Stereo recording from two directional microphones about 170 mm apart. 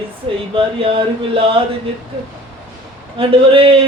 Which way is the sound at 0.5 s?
30° right (ahead or behind).